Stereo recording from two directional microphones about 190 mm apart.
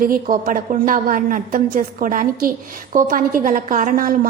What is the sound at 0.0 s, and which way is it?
A woman's voice, 45° right (ahead or behind).